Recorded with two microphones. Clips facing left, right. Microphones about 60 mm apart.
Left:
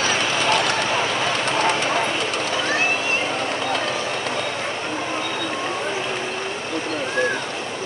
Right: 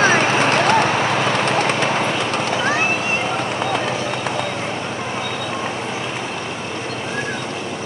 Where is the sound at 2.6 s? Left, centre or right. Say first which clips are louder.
Right 2 dB; right.